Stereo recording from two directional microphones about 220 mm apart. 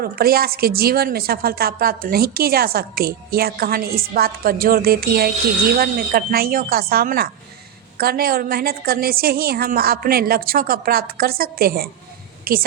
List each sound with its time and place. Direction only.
0.0 s a woman's voice: 45° right (ahead or behind)